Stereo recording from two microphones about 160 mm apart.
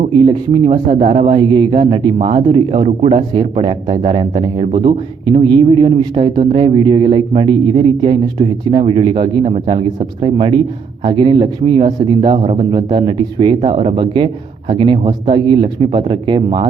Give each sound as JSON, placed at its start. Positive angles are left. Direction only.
{"t": 0.2, "sound": "speech", "side_deg": -30}